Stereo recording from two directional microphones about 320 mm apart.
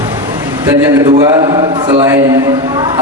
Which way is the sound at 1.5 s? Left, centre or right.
Centre.